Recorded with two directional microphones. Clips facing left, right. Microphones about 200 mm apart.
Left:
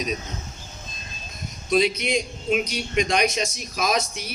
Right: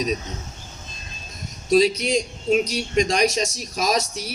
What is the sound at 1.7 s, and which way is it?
Speech, 40° right (ahead or behind).